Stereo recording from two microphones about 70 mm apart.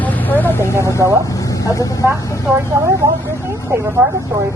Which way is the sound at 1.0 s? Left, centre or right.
Right.